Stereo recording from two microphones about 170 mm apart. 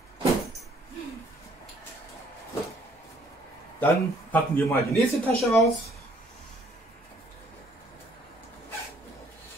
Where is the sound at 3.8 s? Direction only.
15° left (ahead or behind).